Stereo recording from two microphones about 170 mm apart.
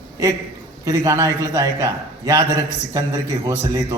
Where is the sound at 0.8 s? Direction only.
20° right (ahead or behind).